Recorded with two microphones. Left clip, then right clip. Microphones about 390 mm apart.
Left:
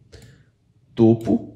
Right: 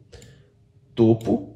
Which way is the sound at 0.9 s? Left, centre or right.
Centre.